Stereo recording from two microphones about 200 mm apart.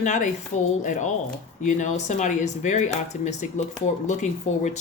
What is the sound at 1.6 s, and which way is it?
A woman's voice, 35° left (ahead or behind).